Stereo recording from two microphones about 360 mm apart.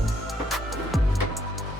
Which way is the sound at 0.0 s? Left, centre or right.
Centre.